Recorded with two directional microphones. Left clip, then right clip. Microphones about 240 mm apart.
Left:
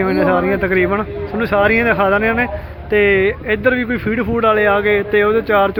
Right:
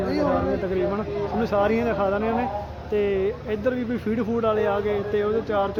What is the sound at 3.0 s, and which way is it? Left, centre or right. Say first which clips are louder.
Speech: left 10 dB; right.